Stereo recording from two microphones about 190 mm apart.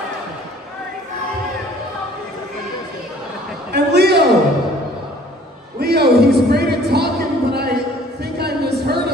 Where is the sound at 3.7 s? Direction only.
60° right (ahead or behind).